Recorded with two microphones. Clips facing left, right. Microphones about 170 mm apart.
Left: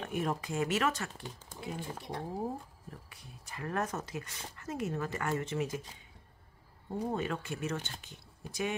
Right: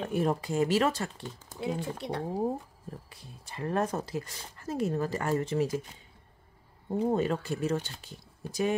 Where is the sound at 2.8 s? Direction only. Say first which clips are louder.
Right 5 dB; 30° right (ahead or behind).